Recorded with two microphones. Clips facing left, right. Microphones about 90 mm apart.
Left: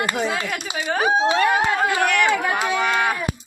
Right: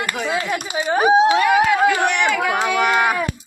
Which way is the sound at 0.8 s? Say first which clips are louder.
Right 5 dB; 15° right (ahead or behind).